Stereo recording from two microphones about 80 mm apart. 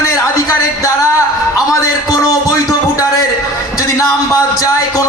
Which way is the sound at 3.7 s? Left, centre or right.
Left.